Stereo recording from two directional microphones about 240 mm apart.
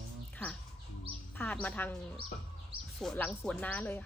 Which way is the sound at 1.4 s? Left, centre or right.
Centre.